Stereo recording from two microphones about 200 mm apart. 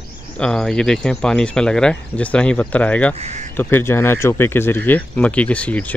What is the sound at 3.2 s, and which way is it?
Speech, 35° right (ahead or behind).